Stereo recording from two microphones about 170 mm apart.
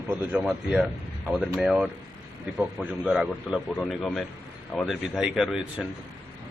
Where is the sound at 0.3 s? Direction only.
5° right (ahead or behind).